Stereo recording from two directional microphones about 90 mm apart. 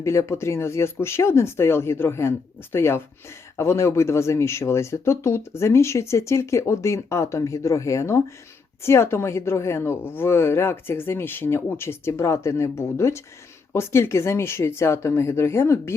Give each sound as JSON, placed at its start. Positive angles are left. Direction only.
{"t": 0.0, "sound": "speech", "side_deg": 35}